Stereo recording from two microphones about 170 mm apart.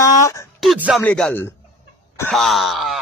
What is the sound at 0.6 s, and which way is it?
Speech, 5° right (ahead or behind).